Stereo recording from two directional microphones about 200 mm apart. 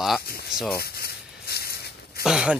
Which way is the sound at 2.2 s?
5° right (ahead or behind).